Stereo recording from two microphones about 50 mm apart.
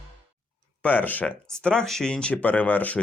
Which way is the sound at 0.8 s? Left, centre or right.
Left.